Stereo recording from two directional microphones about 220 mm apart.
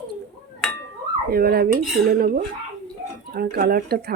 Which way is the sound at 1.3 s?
45° right (ahead or behind).